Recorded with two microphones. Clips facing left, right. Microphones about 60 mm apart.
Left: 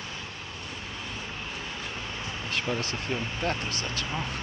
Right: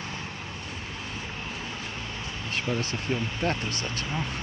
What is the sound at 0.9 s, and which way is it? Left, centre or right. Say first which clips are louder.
Vehicle: even; centre.